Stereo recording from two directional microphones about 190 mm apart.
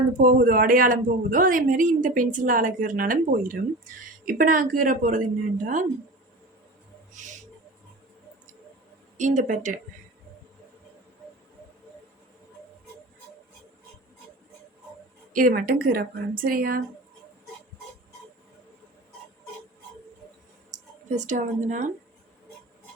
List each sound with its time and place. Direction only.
0.2 s a man's voice: 50° right (ahead or behind)
7.2 s owl: 40° right (ahead or behind)
9.1 s speech: 40° right (ahead or behind)
15.3 s a man's voice: 45° right (ahead or behind)
21.2 s speech: 40° right (ahead or behind)